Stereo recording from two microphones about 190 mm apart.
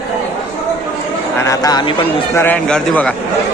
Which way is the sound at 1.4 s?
20° left (ahead or behind).